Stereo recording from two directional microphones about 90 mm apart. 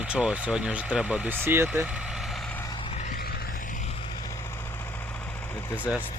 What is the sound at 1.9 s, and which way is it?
Vehicle, 10° right (ahead or behind).